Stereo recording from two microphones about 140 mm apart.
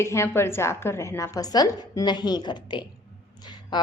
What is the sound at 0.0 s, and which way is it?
A woman's voice, 20° left (ahead or behind).